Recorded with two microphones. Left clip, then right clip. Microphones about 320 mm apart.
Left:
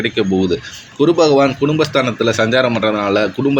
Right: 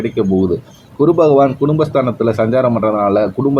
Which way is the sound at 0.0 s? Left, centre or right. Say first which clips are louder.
Right 1 dB; right.